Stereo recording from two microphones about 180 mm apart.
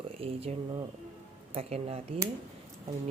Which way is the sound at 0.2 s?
35° right (ahead or behind).